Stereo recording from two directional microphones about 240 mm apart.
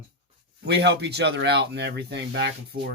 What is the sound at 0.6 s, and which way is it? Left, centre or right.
Speech, right.